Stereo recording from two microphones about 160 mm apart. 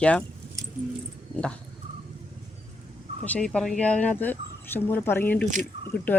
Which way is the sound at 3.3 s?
5° left (ahead or behind).